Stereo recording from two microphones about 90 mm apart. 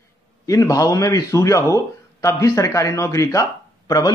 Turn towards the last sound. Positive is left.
turn(degrees=45)  # may be behind; listen again after turning